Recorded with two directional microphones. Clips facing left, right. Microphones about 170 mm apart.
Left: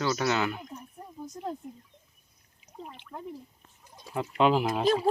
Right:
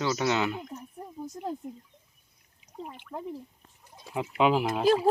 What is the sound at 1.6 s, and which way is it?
Speech, 20° right (ahead or behind).